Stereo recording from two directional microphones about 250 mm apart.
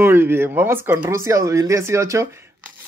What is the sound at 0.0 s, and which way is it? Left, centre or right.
Speech, centre.